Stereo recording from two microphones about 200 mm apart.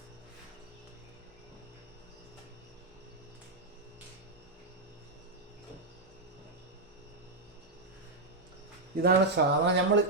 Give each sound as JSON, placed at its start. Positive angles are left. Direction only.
{"t": 9.0, "sound": "speech", "side_deg": -55}